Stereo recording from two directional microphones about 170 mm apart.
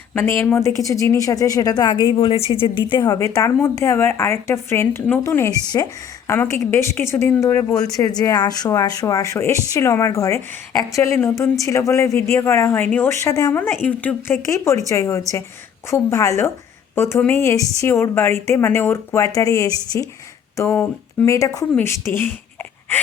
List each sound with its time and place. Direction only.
0.1 s a woman's voice: 15° left (ahead or behind)
13.8 s speech: 10° left (ahead or behind)